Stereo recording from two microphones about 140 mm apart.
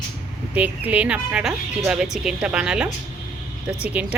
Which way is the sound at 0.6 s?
10° right (ahead or behind).